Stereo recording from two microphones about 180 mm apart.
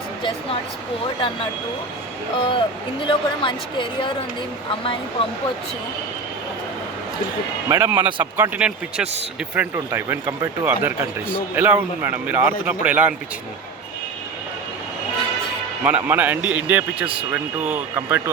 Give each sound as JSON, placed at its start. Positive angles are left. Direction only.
{"t": 2.4, "sound": "a woman's voice", "side_deg": 30}
{"t": 7.7, "sound": "speech", "side_deg": -15}
{"t": 15.8, "sound": "speech", "side_deg": -10}